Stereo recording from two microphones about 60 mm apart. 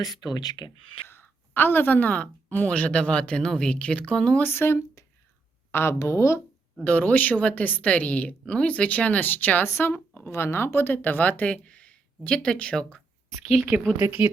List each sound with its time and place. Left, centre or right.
0.0 s speech: left
1.0 s a woman's voice: left; by 4.4 s centre
4.4 s a woman's voice: left
6.8 s a woman's voice: left
14.0 s speech: right